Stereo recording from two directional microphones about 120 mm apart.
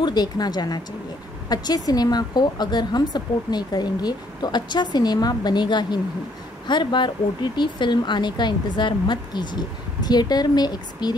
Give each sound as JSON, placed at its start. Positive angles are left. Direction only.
{"t": 0.0, "sound": "speech", "side_deg": 35}